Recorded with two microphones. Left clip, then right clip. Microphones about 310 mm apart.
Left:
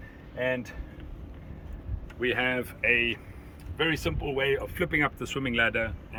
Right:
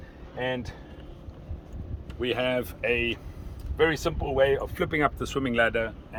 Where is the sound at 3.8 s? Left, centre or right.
Centre.